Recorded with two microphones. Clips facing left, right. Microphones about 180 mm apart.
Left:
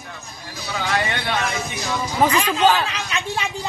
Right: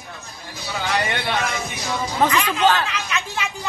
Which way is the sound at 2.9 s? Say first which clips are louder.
Left 1 dB; 30° left (ahead or behind).